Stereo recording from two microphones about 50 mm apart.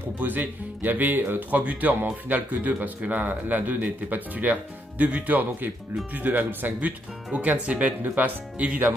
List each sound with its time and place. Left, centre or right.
0.2 s a man's voice: right